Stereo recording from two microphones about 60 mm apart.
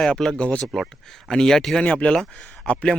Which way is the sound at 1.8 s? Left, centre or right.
Centre.